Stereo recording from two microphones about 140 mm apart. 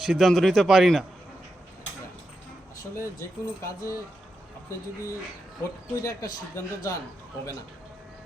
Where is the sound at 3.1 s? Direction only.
20° left (ahead or behind).